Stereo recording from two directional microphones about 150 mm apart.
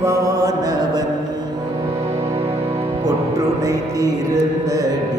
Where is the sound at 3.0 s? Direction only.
25° right (ahead or behind).